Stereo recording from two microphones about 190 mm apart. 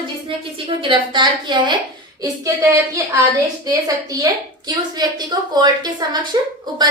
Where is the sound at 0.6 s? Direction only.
25° right (ahead or behind).